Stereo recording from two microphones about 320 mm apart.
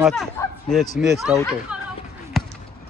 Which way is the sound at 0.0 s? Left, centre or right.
Centre.